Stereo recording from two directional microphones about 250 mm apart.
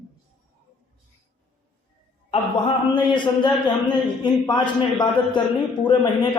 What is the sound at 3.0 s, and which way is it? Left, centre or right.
A man's voice, centre.